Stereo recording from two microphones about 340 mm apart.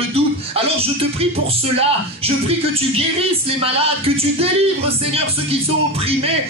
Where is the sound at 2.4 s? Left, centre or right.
Centre.